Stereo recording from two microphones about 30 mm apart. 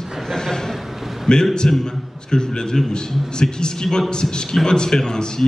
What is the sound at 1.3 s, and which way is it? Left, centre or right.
A man's voice, left.